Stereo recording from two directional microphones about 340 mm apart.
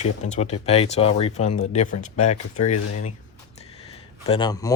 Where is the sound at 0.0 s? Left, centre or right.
Centre.